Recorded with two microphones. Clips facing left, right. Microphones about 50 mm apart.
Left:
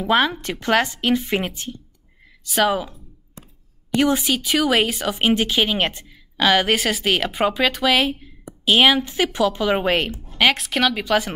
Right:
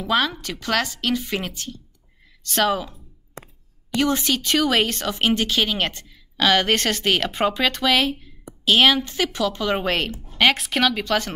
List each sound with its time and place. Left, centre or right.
0.0 s speech: left
2.4 s speech: centre
3.4 s a sound: right
3.9 s speech: centre